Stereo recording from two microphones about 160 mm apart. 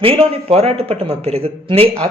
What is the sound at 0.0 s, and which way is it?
A man's voice, 35° right (ahead or behind).